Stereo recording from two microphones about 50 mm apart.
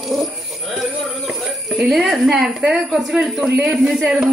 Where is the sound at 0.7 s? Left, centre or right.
Centre.